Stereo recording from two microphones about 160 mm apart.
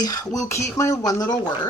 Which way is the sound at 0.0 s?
20° left (ahead or behind).